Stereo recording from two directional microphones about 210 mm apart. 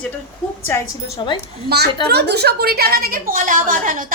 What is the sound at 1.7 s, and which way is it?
A woman's voice, 45° right (ahead or behind).